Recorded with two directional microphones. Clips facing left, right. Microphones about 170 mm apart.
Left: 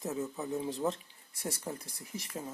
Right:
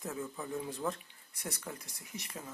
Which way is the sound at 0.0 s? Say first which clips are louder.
Left 4 dB; 20° left (ahead or behind).